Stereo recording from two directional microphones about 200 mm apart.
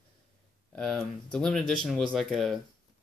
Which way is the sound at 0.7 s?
Centre (ahead or behind).